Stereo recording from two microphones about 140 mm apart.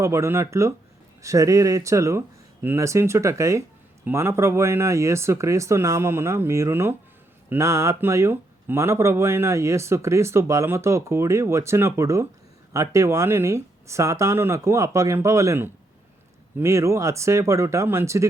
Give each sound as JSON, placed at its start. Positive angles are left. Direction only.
{"t": 0.0, "sound": "speech", "side_deg": -20}